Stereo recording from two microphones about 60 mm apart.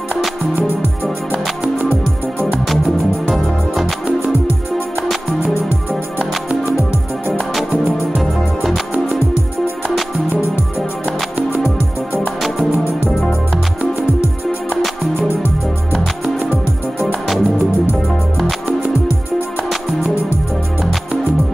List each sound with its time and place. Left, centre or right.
3.3 s music: centre
5.4 s music: right
8.2 s music: centre
12.4 s music: centre
17.0 s music: centre